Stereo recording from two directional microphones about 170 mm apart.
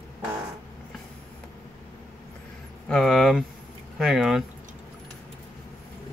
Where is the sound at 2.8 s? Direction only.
5° left (ahead or behind).